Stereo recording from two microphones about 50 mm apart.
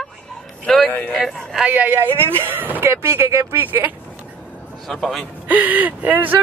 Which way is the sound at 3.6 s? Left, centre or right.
Right.